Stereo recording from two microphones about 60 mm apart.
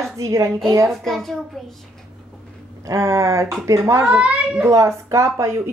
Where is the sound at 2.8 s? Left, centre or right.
Right.